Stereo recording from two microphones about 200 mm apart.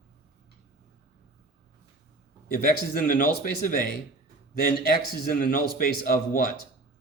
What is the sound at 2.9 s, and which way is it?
Speech, 45° left (ahead or behind).